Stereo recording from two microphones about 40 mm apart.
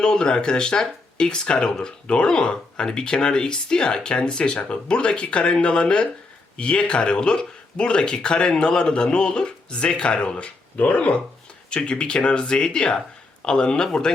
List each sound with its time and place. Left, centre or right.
0.0 s speech: centre
10.3 s speech: left; by 14.1 s centre